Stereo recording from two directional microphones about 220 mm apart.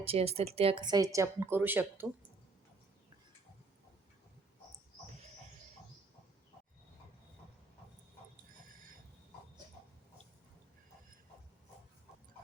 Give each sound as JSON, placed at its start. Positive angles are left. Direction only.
{"t": 0.0, "sound": "speech", "side_deg": -25}